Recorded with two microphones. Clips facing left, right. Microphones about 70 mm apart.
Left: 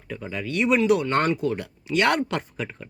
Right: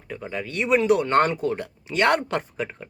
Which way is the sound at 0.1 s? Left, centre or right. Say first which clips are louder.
Left 1 dB; right.